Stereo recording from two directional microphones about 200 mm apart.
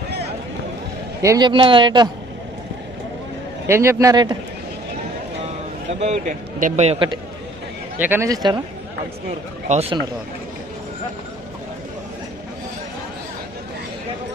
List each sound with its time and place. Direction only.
1.2 s speech: 20° right (ahead or behind)
3.6 s a man's voice: 15° right (ahead or behind)
5.9 s speech: 35° right (ahead or behind)
8.0 s a man's voice: 10° right (ahead or behind)
9.7 s speech: 30° right (ahead or behind)